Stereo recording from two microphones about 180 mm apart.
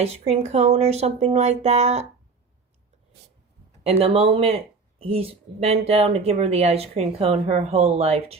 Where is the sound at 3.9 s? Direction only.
35° right (ahead or behind).